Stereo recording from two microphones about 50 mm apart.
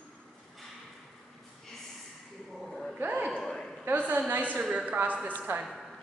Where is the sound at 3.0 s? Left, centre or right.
Right.